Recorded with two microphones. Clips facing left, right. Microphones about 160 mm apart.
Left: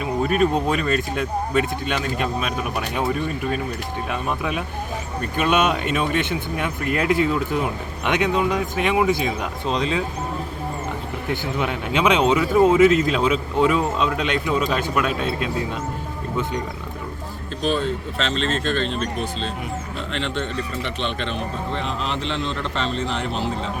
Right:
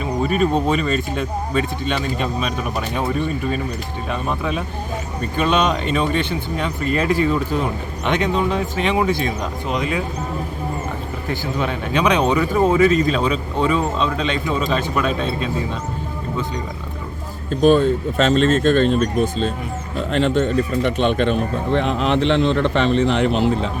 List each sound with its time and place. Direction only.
0.0 s speech: 5° left (ahead or behind)
11.6 s speech: 10° left (ahead or behind)
17.5 s speech: 50° right (ahead or behind)